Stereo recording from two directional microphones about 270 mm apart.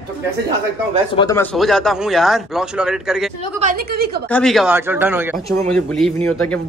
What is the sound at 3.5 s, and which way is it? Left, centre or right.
Speech, right.